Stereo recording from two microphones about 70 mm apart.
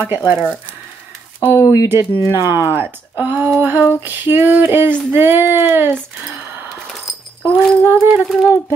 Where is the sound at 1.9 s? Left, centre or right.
Right.